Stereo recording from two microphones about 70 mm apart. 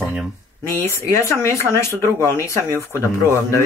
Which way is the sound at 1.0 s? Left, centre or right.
Left.